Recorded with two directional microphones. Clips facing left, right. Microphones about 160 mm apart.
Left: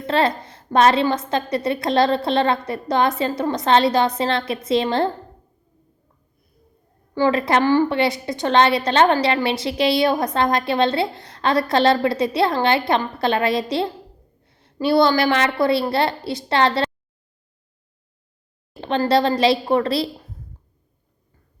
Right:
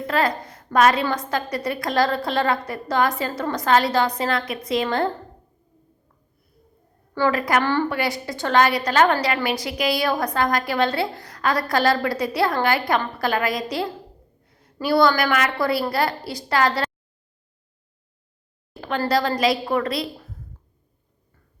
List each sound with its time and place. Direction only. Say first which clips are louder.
0.1 s a child's voice: left 3 dB; 25° left (ahead or behind)
7.1 s a woman's voice: left 3 dB; 20° left (ahead or behind)
7.6 s a woman's voice: left 5 dB; 15° left (ahead or behind)
18.8 s a woman's voice: left 4 dB; 25° left (ahead or behind)